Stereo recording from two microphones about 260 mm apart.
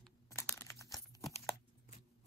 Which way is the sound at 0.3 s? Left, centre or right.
Centre.